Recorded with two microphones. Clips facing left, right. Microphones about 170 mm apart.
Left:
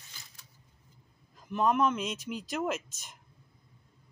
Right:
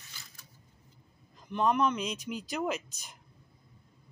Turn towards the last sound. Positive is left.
turn(degrees=0)  # may be behind; listen again after turning